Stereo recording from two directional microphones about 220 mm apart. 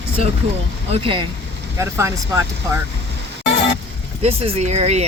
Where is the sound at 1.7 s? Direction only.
15° right (ahead or behind).